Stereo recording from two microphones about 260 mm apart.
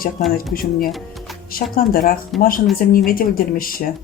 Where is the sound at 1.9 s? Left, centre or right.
Left.